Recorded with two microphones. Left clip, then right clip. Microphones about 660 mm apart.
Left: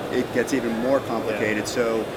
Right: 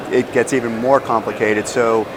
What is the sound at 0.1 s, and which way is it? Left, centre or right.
Speech, right.